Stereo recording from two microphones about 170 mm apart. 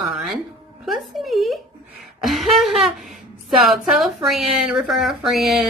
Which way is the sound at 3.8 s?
Centre (ahead or behind).